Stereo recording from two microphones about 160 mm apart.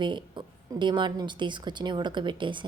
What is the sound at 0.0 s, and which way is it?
A woman's voice, 30° right (ahead or behind).